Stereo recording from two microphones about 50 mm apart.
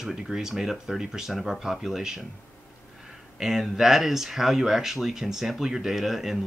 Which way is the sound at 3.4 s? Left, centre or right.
Centre.